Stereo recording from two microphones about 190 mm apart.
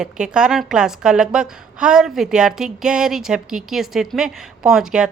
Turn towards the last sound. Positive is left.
turn(degrees=-5)  # may be behind; listen again after turning